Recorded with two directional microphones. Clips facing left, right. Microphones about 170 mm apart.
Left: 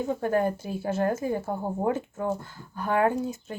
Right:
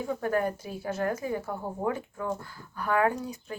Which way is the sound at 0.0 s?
25° left (ahead or behind).